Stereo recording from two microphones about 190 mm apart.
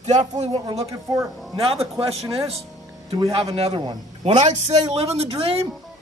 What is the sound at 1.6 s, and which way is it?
Speech, 30° right (ahead or behind).